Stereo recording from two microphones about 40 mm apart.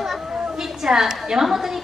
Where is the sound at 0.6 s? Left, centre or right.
Centre.